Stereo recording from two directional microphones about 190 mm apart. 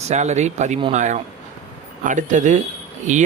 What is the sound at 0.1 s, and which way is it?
Speech, 35° right (ahead or behind).